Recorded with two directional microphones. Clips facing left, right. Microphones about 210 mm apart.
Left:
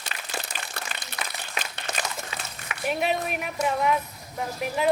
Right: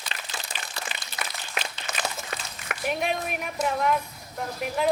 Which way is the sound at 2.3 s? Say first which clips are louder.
Right 2 dB; 50° right (ahead or behind).